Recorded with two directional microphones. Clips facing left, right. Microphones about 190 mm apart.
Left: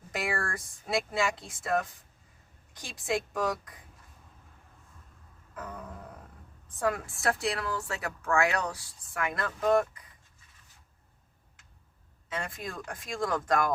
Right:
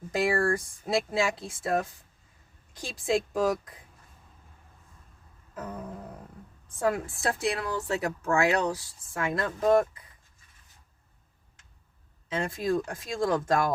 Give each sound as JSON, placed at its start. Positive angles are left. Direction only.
{"t": 0.1, "sound": "speech", "side_deg": -25}
{"t": 3.1, "sound": "speech", "side_deg": -30}
{"t": 5.5, "sound": "speech", "side_deg": -25}
{"t": 12.3, "sound": "speech", "side_deg": -25}